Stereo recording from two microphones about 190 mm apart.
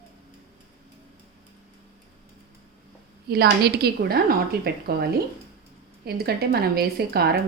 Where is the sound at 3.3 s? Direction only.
55° right (ahead or behind).